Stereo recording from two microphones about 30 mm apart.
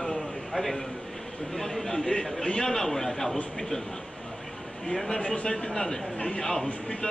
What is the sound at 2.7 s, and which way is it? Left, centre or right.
Speech, centre.